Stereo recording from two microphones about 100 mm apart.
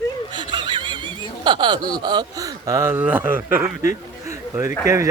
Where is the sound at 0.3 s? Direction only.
50° right (ahead or behind).